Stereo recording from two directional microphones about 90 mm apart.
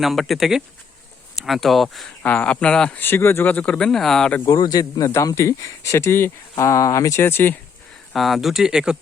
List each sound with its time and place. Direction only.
0.0 s speech: centre (ahead or behind)
2.2 s speech: 15° left (ahead or behind)
3.0 s speech: 25° left (ahead or behind); by 4.4 s 5° left (ahead or behind)
4.4 s speech: 50° left (ahead or behind)
7.2 s speech: 25° left (ahead or behind)
8.1 s speech: centre (ahead or behind)